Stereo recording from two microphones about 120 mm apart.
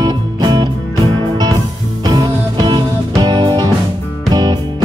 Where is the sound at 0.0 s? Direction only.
35° right (ahead or behind).